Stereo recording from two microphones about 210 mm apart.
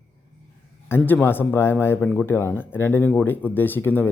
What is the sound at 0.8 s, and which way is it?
A man's voice, 10° left (ahead or behind).